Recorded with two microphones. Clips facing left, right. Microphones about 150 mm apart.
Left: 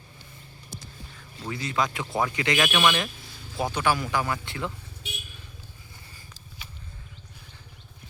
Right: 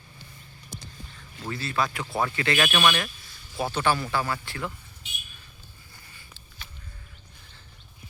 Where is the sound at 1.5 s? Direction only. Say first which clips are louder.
Left 1 dB; 20° left (ahead or behind).